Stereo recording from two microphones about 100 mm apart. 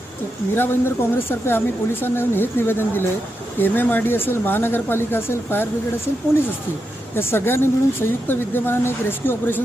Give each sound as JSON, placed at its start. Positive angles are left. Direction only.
{"t": 0.5, "sound": "a woman's voice", "side_deg": 25}
{"t": 7.2, "sound": "a woman's voice", "side_deg": 25}